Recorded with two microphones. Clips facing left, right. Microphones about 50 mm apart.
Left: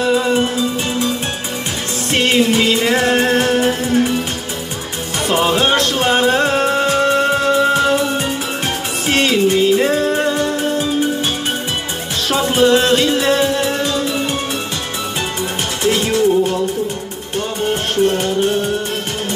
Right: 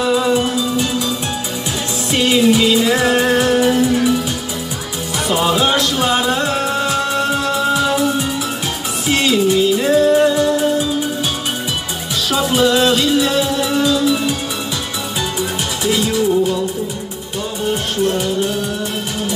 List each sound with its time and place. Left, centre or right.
0.0 s music: centre
2.0 s music: left
5.3 s music: left
9.0 s music: left
12.3 s music: left
15.8 s music: left
18.1 s music: left